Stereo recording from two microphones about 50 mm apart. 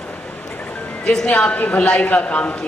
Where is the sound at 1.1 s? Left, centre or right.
Centre.